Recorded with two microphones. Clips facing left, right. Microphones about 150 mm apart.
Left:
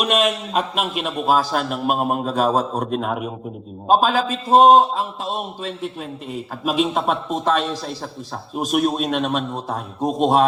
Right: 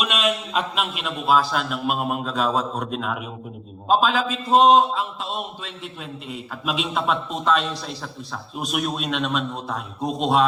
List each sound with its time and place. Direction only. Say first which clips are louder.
0.0 s a man's voice: left 4 dB; 45° left (ahead or behind)